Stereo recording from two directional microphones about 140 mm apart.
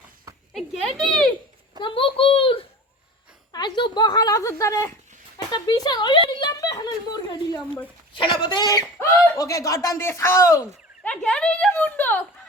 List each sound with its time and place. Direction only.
0.5 s speech: centre (ahead or behind)
1.8 s a child's voice: 40° left (ahead or behind); by 10.6 s 20° left (ahead or behind)
11.0 s speech: 5° left (ahead or behind)